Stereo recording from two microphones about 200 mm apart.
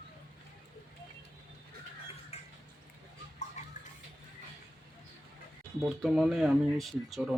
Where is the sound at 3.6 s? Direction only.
35° left (ahead or behind).